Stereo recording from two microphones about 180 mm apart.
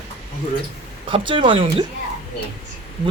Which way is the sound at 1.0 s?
25° right (ahead or behind).